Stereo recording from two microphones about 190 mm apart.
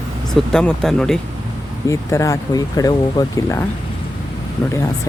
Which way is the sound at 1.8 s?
15° left (ahead or behind).